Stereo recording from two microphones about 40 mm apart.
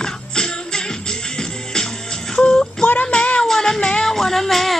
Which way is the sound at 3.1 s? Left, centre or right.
Left.